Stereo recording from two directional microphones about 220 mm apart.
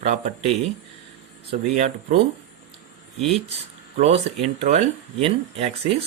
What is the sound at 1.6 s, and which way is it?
Speech, 30° right (ahead or behind).